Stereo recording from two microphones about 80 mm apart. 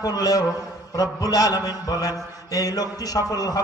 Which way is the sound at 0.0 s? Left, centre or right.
Left.